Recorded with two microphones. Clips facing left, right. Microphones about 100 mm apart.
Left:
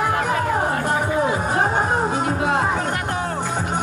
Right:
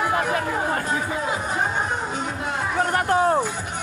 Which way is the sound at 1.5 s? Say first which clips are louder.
Left 5 dB; 40° left (ahead or behind).